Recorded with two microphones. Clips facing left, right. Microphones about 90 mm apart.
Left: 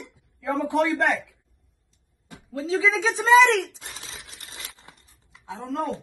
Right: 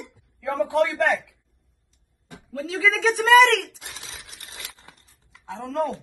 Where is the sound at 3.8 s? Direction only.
35° left (ahead or behind).